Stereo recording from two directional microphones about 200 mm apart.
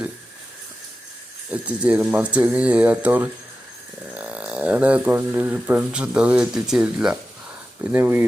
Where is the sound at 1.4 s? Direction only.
5° right (ahead or behind).